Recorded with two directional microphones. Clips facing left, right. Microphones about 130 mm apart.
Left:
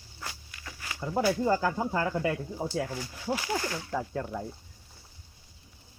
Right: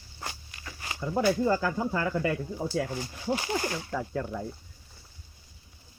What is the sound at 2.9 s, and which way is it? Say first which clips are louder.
Speech: right 2 dB; 25° right (ahead or behind).